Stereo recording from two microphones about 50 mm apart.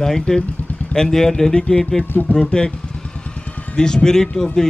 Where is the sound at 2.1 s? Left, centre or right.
Left.